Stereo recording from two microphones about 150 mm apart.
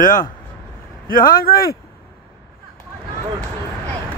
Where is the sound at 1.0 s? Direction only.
70° left (ahead or behind); by 1.8 s 85° left.